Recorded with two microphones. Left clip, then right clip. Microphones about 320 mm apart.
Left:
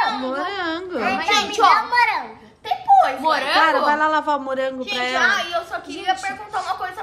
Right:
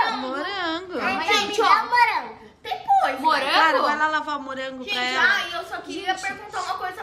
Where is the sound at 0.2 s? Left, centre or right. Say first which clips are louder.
Left 3 dB; centre.